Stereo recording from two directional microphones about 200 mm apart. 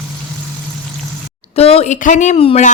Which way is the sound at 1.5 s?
30° left (ahead or behind).